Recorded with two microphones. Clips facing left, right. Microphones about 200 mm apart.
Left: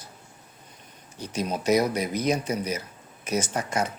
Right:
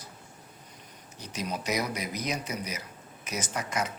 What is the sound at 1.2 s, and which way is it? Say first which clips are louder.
A man's voice: left 7 dB; 30° left (ahead or behind).